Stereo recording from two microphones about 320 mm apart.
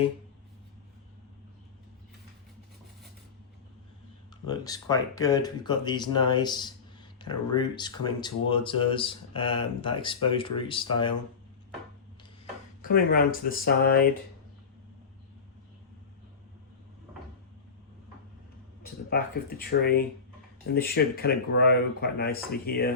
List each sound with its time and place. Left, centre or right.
4.4 s speech: centre
12.8 s speech: left
18.8 s speech: left